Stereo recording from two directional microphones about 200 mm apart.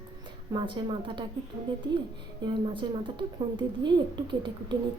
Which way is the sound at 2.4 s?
25° right (ahead or behind).